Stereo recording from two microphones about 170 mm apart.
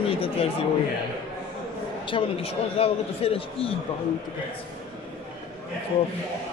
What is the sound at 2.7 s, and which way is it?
A man's voice, 35° left (ahead or behind).